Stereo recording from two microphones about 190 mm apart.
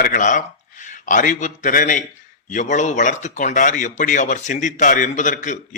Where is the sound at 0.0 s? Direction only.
40° left (ahead or behind).